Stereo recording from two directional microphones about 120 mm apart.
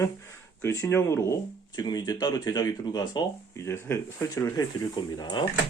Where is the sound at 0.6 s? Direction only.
25° left (ahead or behind).